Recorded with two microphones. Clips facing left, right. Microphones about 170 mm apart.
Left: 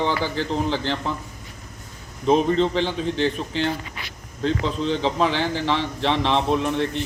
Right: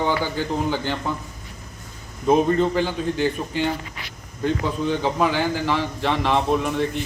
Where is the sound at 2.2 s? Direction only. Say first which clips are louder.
Right 1 dB; 10° right (ahead or behind).